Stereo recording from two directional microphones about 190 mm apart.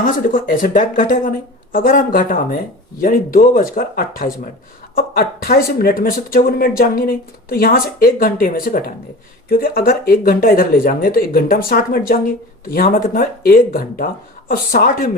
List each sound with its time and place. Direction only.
0.0 s speech: 45° left (ahead or behind)